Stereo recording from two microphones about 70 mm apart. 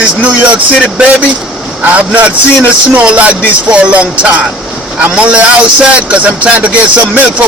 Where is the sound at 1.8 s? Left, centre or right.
Right.